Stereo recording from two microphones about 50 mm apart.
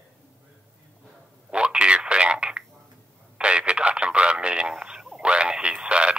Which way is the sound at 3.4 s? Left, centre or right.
Centre.